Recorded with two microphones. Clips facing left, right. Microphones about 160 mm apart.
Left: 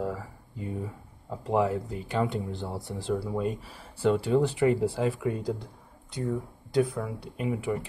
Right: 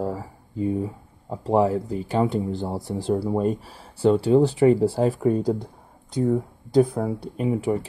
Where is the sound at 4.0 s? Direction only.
30° right (ahead or behind).